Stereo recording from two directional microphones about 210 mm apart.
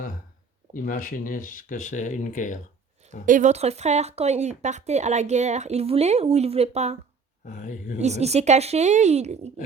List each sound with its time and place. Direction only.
0.7 s speech: 40° left (ahead or behind)
3.2 s speech: 35° right (ahead or behind)
7.4 s speech: 35° left (ahead or behind)
8.0 s speech: 30° right (ahead or behind)